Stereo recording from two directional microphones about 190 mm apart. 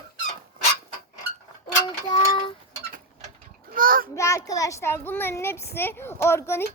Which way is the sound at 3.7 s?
50° right (ahead or behind).